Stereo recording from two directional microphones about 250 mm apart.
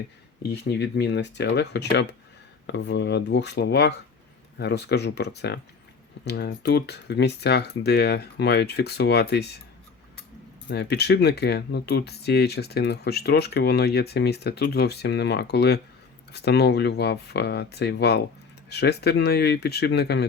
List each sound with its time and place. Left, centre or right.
0.7 s speech: left
10.7 s speech: left